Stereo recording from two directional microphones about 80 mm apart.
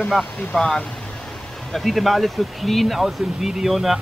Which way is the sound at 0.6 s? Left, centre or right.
Centre.